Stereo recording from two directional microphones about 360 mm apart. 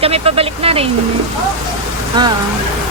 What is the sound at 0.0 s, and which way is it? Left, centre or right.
Speech, centre.